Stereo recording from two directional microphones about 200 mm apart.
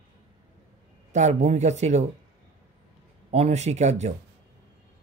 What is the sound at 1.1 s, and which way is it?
Speech, 35° right (ahead or behind).